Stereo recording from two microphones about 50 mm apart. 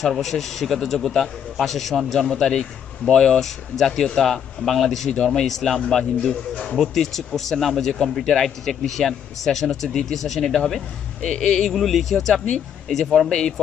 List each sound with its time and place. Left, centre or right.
0.0 s a man's voice: centre
5.1 s speech: centre
6.7 s a man's voice: centre